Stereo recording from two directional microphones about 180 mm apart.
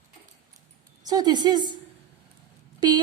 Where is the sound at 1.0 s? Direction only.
20° right (ahead or behind).